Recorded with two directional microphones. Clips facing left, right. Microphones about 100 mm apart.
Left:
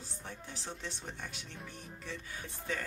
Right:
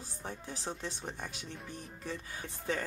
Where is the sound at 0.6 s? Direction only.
20° right (ahead or behind).